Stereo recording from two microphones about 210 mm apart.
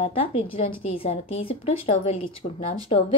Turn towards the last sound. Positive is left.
turn(degrees=30)  # may be behind; listen again after turning